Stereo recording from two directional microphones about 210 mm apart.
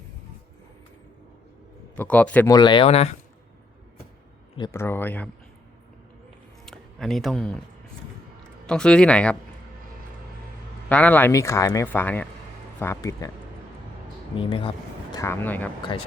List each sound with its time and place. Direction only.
2.0 s speech: 5° left (ahead or behind)
2.5 s speech: 20° left (ahead or behind)
4.5 s speech: 15° left (ahead or behind)
6.7 s speech: centre (ahead or behind)
8.6 s speech: 5° left (ahead or behind)
10.8 s speech: 5° left (ahead or behind)
14.3 s speech: 25° left (ahead or behind)
15.1 s speech: 10° left (ahead or behind)